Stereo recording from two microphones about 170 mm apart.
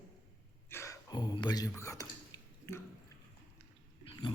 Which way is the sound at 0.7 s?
15° left (ahead or behind).